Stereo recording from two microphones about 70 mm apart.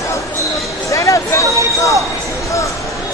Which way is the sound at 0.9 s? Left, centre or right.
Left.